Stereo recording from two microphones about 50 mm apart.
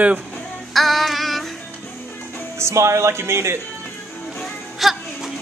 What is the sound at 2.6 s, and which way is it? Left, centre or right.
Speech, right.